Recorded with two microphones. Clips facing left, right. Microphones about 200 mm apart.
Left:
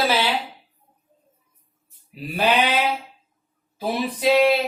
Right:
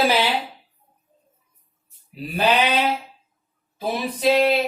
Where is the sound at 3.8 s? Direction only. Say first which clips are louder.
Left 1 dB; 5° left (ahead or behind).